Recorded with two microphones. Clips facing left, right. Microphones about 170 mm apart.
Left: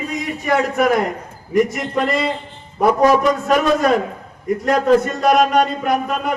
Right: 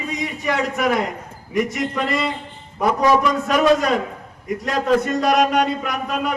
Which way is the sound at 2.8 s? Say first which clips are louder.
Left 3 dB; 50° left (ahead or behind).